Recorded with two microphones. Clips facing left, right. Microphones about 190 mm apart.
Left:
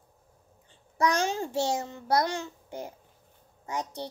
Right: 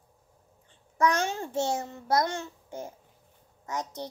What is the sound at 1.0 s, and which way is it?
Child singing, 35° left (ahead or behind).